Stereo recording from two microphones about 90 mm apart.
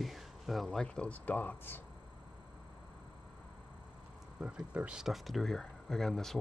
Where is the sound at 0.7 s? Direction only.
10° left (ahead or behind).